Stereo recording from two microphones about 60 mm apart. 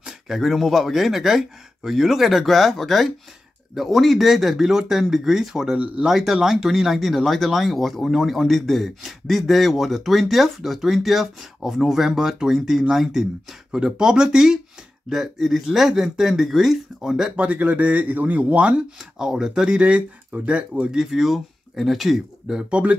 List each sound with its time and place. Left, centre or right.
0.3 s speech: centre
17.4 s speech: right
21.0 s speech: centre
22.7 s speech: centre